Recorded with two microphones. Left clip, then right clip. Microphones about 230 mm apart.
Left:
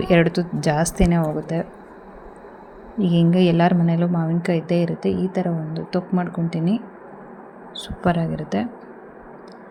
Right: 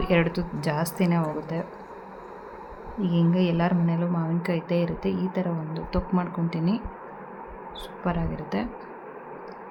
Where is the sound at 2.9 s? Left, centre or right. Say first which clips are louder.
Left 6 dB; centre.